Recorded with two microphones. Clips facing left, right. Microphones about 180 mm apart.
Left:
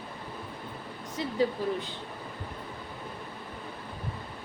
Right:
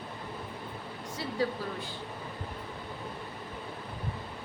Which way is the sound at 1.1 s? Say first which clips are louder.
Left 4 dB; 20° left (ahead or behind).